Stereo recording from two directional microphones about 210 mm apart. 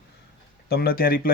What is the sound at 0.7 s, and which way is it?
Speech, 45° left (ahead or behind).